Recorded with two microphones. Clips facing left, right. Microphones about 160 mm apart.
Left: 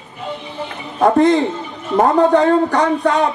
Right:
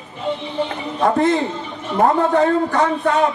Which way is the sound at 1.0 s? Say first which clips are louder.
Left 4 dB; 40° left (ahead or behind).